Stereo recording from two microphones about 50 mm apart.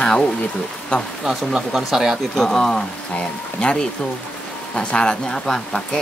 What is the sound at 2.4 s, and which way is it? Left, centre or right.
Speech, centre.